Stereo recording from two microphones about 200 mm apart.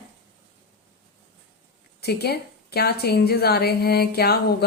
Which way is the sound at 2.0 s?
55° left (ahead or behind).